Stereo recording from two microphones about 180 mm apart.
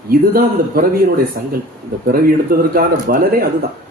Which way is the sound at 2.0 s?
55° right (ahead or behind).